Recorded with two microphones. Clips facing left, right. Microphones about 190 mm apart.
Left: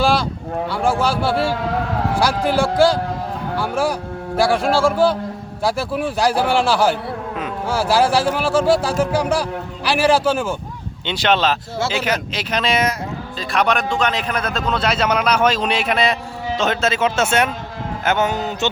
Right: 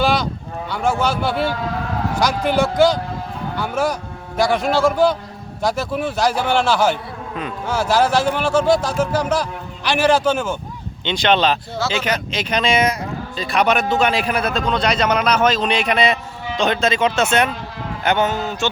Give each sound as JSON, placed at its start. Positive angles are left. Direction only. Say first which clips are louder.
{"t": 0.7, "sound": "a man's voice", "louder": "even", "side_deg": 30}
{"t": 2.2, "sound": "a man's voice", "louder": "right 1 dB", "side_deg": 5}
{"t": 4.6, "sound": "a man's voice", "louder": "even", "side_deg": 30}
{"t": 5.6, "sound": "a man's voice", "louder": "even", "side_deg": 10}
{"t": 14.6, "sound": "a man's voice", "louder": "right 1 dB", "side_deg": 5}
{"t": 18.3, "sound": "speech", "louder": "left 1 dB", "side_deg": 15}